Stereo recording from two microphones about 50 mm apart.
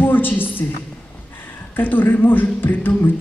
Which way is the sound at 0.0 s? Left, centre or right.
Left.